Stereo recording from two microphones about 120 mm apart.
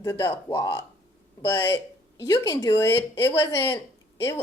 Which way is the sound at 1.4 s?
15° left (ahead or behind).